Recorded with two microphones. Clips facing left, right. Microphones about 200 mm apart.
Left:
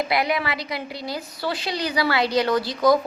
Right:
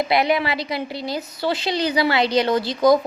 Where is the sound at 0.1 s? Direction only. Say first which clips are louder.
Right 4 dB; 25° right (ahead or behind).